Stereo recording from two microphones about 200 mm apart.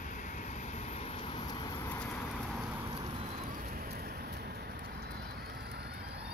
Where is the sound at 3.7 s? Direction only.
50° right (ahead or behind).